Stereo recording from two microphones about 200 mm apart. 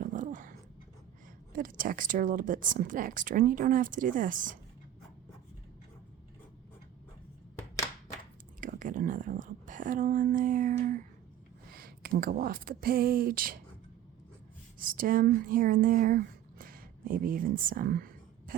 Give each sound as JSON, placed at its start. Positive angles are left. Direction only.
{"t": 0.0, "sound": "dog", "side_deg": -40}
{"t": 1.5, "sound": "speech", "side_deg": -45}
{"t": 8.6, "sound": "speech", "side_deg": -40}
{"t": 14.8, "sound": "speech", "side_deg": -45}